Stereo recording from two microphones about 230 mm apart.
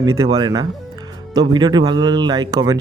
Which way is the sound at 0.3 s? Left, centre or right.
Centre.